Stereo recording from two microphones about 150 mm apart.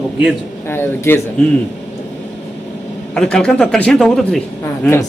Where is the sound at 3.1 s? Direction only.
5° left (ahead or behind).